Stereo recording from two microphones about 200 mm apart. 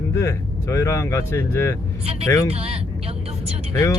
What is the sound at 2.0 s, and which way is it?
Speech, 30° right (ahead or behind).